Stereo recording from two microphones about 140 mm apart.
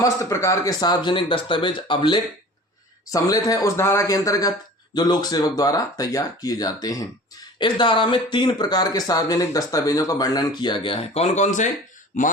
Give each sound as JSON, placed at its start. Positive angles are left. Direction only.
{"t": 0.0, "sound": "speech", "side_deg": 20}
{"t": 3.1, "sound": "speech", "side_deg": 25}